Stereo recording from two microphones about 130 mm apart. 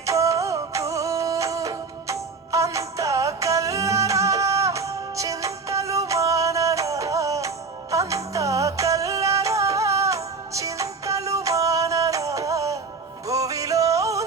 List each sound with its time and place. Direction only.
0.0 s music: 25° right (ahead or behind)